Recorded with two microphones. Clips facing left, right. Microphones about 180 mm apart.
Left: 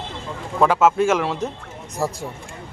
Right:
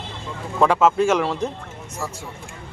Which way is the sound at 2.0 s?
40° left (ahead or behind).